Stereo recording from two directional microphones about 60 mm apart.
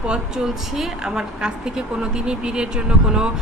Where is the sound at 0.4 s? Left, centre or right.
Centre.